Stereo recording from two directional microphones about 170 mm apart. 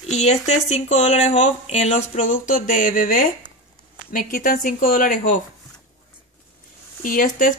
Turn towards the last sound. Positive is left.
turn(degrees=55)  # may be behind; listen again after turning